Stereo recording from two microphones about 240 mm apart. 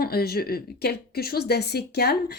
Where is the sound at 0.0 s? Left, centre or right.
Left.